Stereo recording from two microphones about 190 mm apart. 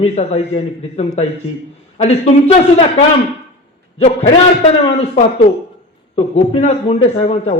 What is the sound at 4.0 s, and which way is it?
Speech, 30° left (ahead or behind).